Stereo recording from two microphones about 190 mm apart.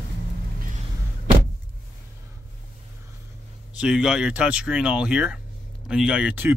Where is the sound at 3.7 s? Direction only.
5° right (ahead or behind).